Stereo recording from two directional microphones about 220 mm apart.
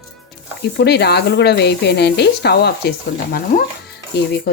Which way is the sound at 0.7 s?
50° left (ahead or behind).